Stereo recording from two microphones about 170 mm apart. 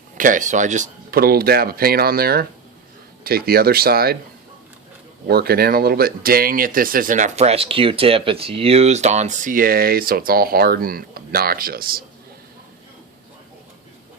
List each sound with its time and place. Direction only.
0.2 s speech: 50° right (ahead or behind)
1.1 s speech: 65° right (ahead or behind)
5.3 s speech: 65° right (ahead or behind)